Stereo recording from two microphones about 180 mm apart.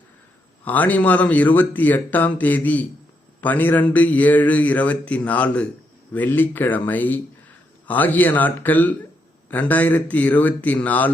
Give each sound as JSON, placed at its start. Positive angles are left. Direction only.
{"t": 0.6, "sound": "speech", "side_deg": 10}